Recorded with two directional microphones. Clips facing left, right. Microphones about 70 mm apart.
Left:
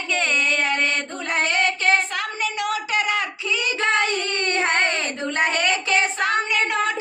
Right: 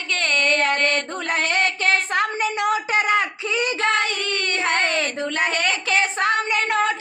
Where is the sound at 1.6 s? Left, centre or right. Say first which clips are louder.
Left 1 dB; left.